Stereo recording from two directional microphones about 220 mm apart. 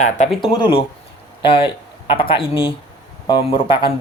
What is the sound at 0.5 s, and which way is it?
Speech, 20° left (ahead or behind).